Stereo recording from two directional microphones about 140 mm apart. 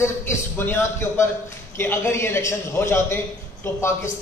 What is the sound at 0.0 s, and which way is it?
A man's voice, 15° left (ahead or behind).